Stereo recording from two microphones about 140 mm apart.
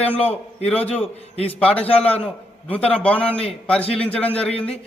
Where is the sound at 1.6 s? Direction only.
10° left (ahead or behind).